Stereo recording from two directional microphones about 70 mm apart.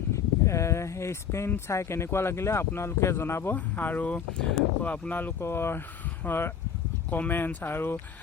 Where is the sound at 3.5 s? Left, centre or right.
Left.